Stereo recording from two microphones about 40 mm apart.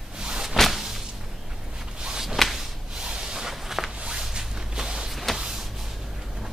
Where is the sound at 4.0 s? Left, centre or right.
Centre.